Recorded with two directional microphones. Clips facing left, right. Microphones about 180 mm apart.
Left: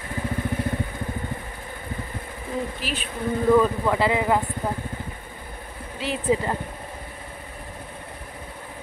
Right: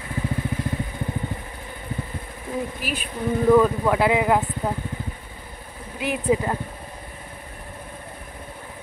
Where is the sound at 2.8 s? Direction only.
10° right (ahead or behind).